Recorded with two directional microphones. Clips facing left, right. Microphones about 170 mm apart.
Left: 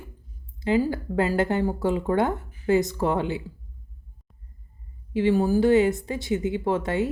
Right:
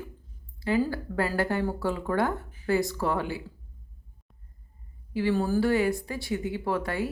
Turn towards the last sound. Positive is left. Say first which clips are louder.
# left 4 dB
turn(degrees=20)  # may be behind; listen again after turning